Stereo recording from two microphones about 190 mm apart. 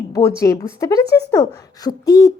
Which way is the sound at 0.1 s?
15° left (ahead or behind).